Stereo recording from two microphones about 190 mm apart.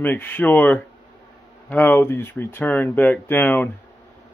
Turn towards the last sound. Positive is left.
turn(degrees=10)  # may be behind; listen again after turning